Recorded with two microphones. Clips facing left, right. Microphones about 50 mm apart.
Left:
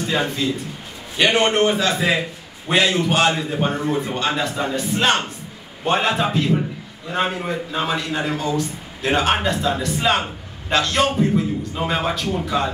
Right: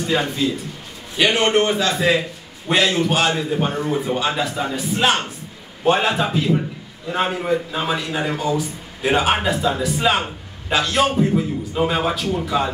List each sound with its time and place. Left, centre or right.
0.0 s a man's voice: centre